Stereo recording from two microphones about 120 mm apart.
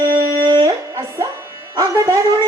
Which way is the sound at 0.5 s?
30° right (ahead or behind).